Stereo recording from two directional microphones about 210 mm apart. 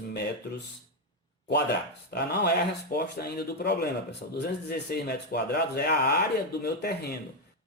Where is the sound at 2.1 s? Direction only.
50° left (ahead or behind).